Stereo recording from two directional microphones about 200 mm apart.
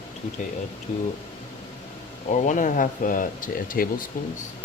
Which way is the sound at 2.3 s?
40° left (ahead or behind).